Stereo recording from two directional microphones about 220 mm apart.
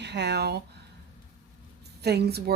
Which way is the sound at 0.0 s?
50° right (ahead or behind).